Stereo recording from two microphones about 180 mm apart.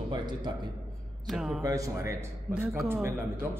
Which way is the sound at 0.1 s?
25° right (ahead or behind).